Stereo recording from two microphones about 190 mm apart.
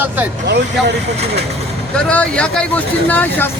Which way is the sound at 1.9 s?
5° left (ahead or behind).